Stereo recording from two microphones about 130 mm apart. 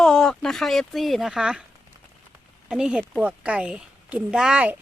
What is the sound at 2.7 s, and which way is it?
A woman's voice, 5° right (ahead or behind).